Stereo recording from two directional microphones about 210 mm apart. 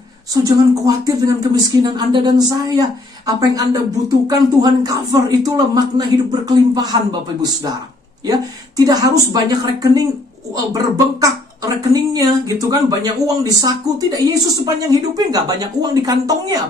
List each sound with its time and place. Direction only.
0.5 s a woman's voice: 15° right (ahead or behind)